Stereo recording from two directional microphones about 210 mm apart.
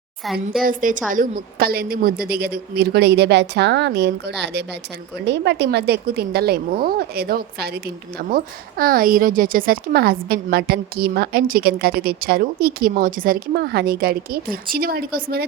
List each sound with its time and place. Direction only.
0.6 s a woman's voice: 40° right (ahead or behind)